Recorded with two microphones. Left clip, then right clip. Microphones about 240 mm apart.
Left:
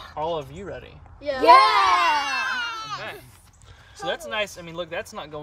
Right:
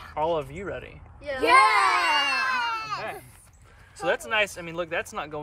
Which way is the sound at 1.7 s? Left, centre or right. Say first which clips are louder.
Left 3 dB; left.